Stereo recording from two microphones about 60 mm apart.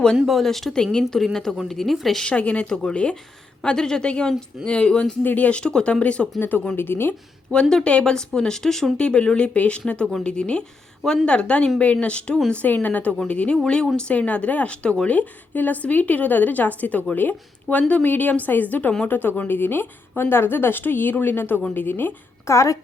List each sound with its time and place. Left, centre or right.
0.3 s speech: centre
2.2 s speech: left
5.2 s speech: left
5.5 s speech: centre
6.7 s speech: left
7.5 s speech: centre; by 22.1 s left
22.4 s a woman's voice: left